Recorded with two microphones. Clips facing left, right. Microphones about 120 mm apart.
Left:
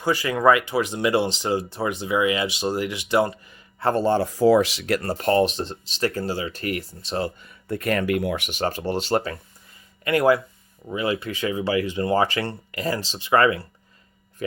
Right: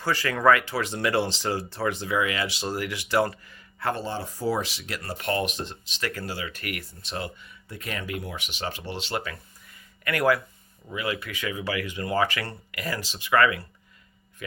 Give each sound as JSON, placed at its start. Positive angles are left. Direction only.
{"t": 0.0, "sound": "speech", "side_deg": 15}
{"t": 3.9, "sound": "speech", "side_deg": 50}
{"t": 4.2, "sound": "speech", "side_deg": 90}
{"t": 5.0, "sound": "speech", "side_deg": 30}
{"t": 7.7, "sound": "speech", "side_deg": 60}
{"t": 8.4, "sound": "speech", "side_deg": 45}
{"t": 10.0, "sound": "speech", "side_deg": 25}